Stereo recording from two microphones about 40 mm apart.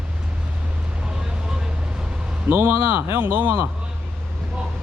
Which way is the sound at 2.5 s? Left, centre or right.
Right.